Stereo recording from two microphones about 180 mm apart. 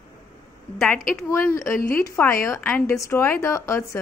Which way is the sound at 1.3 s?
15° left (ahead or behind).